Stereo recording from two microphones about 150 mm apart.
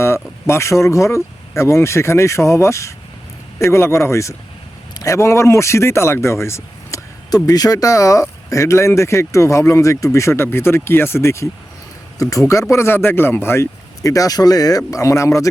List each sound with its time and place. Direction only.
0.0 s speech: 15° left (ahead or behind)